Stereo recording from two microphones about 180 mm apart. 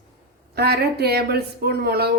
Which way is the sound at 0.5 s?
65° right (ahead or behind).